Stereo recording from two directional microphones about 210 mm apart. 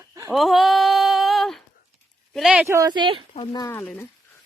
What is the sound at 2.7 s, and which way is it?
Speech, 20° right (ahead or behind).